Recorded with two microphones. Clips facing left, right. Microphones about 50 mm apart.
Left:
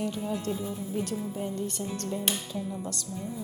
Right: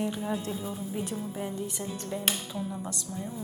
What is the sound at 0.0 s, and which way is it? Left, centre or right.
Speech, centre.